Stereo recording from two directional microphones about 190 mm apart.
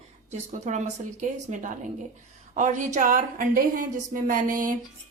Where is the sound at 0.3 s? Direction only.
40° right (ahead or behind).